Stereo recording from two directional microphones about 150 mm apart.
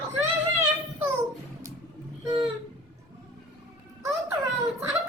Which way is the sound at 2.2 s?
30° right (ahead or behind).